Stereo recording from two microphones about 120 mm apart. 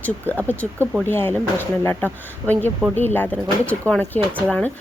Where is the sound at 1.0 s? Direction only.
20° left (ahead or behind).